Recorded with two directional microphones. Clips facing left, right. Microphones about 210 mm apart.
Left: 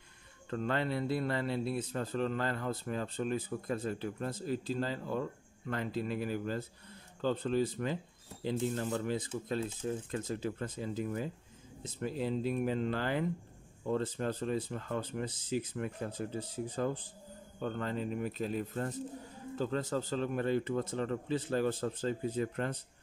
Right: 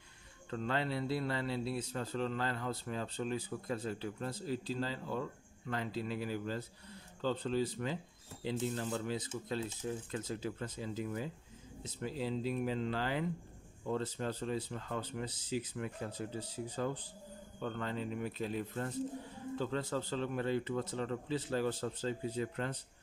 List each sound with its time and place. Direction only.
0.5 s speech: 50° left (ahead or behind)